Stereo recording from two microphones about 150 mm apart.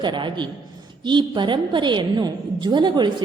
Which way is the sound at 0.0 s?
30° right (ahead or behind).